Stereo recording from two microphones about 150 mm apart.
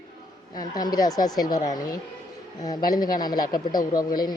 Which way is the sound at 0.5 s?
25° left (ahead or behind).